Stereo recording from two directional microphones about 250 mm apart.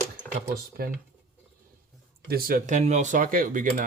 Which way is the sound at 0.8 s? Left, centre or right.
Right.